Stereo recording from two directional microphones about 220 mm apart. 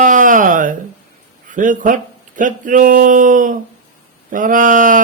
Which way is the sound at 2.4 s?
35° right (ahead or behind).